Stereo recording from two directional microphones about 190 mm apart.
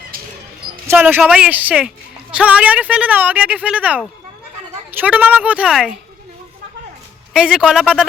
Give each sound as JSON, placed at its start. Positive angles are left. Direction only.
{"t": 0.9, "sound": "speech", "side_deg": -10}
{"t": 7.3, "sound": "a man's voice", "side_deg": -5}